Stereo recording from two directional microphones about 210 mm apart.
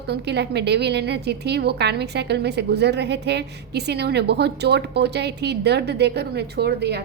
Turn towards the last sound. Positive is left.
turn(degrees=-50)  # may be behind; listen again after turning